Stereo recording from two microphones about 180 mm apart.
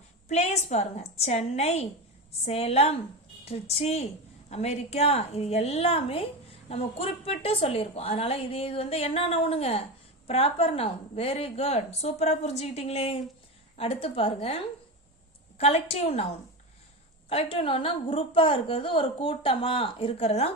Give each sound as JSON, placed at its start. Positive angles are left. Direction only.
{"t": 0.3, "sound": "a woman's voice", "side_deg": 40}
{"t": 17.2, "sound": "a woman's voice", "side_deg": 30}